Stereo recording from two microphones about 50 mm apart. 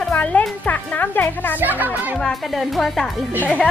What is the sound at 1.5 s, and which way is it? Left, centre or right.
Speech, right.